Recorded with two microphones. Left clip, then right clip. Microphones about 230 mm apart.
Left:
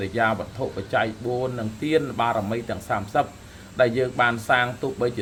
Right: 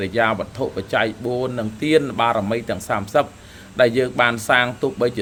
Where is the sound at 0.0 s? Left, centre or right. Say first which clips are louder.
Right 4 dB; right.